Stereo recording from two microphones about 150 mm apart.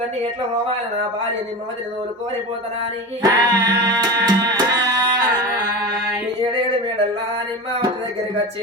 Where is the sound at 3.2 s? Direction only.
25° right (ahead or behind).